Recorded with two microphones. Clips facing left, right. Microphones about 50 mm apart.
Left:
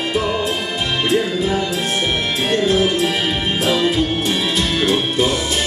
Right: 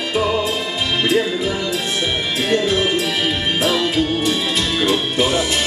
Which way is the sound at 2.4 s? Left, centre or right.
Left.